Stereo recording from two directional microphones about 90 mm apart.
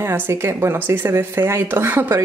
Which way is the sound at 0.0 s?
30° right (ahead or behind).